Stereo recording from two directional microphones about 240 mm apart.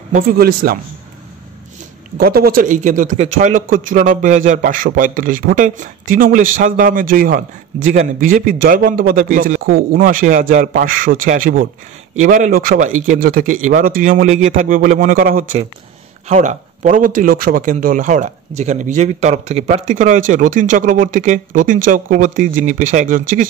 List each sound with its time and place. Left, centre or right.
0.1 s a man's voice: right
2.1 s a man's voice: right